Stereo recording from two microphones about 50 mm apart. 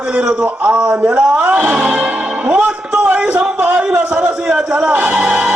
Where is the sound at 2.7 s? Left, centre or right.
Centre.